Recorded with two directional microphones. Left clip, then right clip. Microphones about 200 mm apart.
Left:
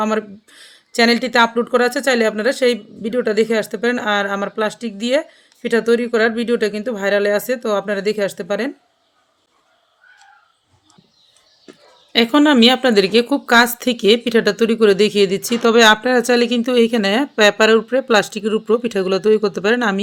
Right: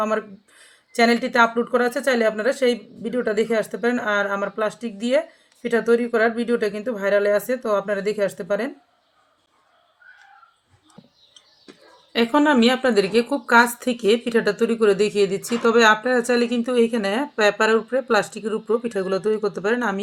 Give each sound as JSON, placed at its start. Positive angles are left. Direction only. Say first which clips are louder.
{"t": 0.0, "sound": "a woman's voice", "louder": "left 3 dB", "side_deg": 50}
{"t": 12.1, "sound": "a woman's voice", "louder": "left 5 dB", "side_deg": 45}